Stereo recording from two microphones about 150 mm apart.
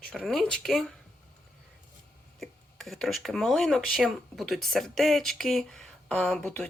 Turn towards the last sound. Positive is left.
turn(degrees=5)  # may be behind; listen again after turning